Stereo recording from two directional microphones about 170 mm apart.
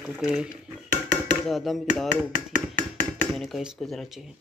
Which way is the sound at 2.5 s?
50° right (ahead or behind).